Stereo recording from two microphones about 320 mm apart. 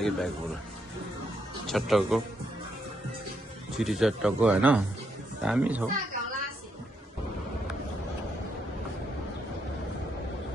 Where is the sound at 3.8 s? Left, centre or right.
Centre.